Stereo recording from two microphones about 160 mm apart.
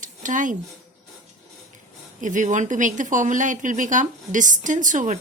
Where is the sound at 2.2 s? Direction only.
50° right (ahead or behind).